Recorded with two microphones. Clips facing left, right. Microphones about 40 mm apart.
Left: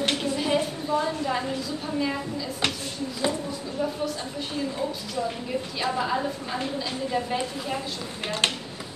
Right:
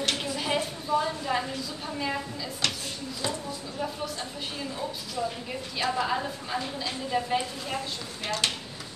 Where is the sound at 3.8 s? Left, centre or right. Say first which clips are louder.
Left 5 dB; centre.